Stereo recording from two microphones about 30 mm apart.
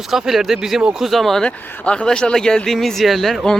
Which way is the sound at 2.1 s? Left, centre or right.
Left.